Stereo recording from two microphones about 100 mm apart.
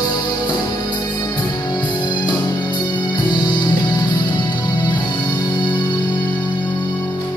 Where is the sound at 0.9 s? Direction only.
45° left (ahead or behind).